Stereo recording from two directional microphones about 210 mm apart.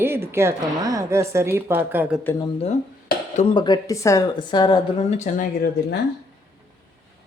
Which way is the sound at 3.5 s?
20° left (ahead or behind).